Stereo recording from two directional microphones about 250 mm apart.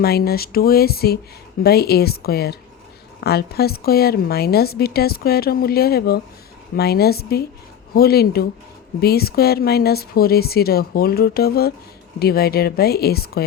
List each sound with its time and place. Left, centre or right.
0.0 s a woman's voice: left